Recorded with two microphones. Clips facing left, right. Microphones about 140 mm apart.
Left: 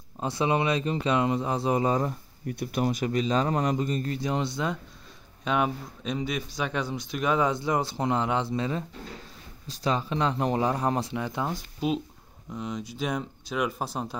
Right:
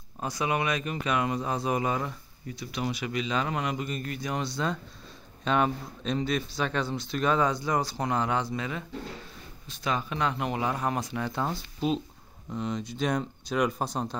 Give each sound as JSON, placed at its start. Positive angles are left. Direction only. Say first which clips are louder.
{"t": 0.2, "sound": "speech", "louder": "left 3 dB", "side_deg": 25}
{"t": 2.4, "sound": "a man's voice", "louder": "left 5 dB", "side_deg": 55}
{"t": 5.4, "sound": "a man's voice", "louder": "right 1 dB", "side_deg": 10}
{"t": 11.1, "sound": "speech", "louder": "even", "side_deg": 15}